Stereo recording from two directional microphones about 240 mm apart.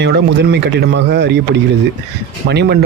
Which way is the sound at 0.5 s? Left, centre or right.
Right.